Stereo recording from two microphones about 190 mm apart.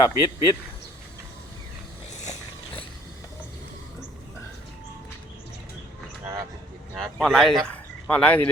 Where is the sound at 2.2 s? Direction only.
35° left (ahead or behind).